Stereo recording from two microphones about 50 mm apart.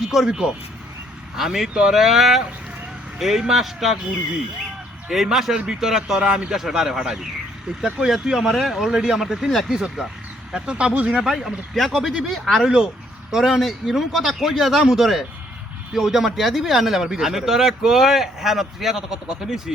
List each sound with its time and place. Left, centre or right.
0.0 s speech: centre
1.4 s speech: centre
5.0 s speech: centre; by 11.2 s right
11.2 s speech: centre
12.6 s speech: centre